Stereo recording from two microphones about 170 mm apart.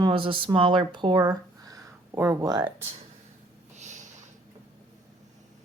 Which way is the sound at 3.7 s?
45° right (ahead or behind).